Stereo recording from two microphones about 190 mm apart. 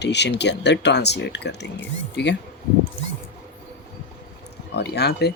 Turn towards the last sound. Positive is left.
turn(degrees=60)  # may be behind; listen again after turning